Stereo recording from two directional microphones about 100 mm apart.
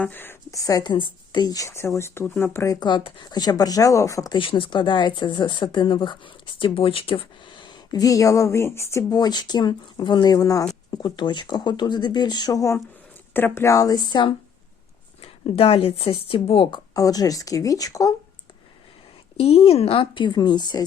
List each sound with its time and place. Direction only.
0.0 s speech: 20° left (ahead or behind)
0.5 s speech: 40° left (ahead or behind)
2.8 s speech: 55° left (ahead or behind); by 4.4 s 35° left (ahead or behind)
4.4 s speech: 55° left (ahead or behind); by 9.0 s 25° left (ahead or behind)
9.0 s speech: 40° left (ahead or behind)
10.3 s speech: 35° left (ahead or behind)
10.9 s speech: 50° left (ahead or behind)
15.2 s speech: 75° left (ahead or behind)
16.7 s speech: 40° left (ahead or behind)
19.4 s a woman's voice: 75° left (ahead or behind); by 20.8 s 45° left (ahead or behind)